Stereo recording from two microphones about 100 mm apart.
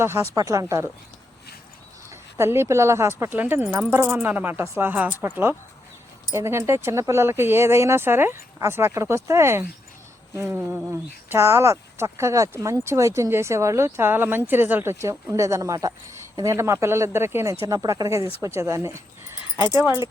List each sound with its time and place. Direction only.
0.3 s speech: 35° right (ahead or behind)
2.4 s speech: 25° right (ahead or behind)